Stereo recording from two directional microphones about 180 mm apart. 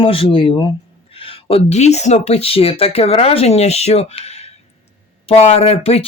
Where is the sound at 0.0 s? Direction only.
30° left (ahead or behind).